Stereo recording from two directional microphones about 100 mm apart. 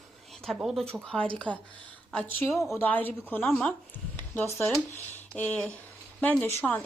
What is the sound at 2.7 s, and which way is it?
Speech, 20° left (ahead or behind).